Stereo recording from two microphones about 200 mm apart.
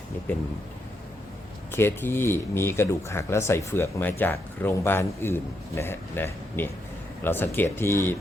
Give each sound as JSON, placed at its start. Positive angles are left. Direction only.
{"t": 1.7, "sound": "speech", "side_deg": 10}